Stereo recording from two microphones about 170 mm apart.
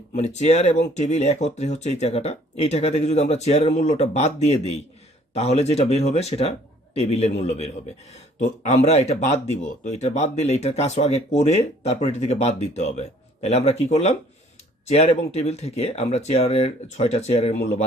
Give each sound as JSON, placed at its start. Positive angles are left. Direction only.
{"t": 0.2, "sound": "speech", "side_deg": 40}